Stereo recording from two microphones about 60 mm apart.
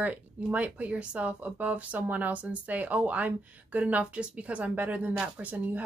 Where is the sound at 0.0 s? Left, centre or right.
Right.